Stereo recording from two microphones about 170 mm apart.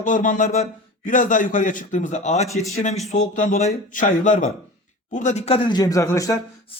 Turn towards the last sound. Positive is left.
turn(degrees=20)  # may be behind; listen again after turning